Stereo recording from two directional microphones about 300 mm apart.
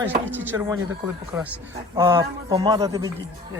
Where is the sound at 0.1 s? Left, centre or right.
Centre.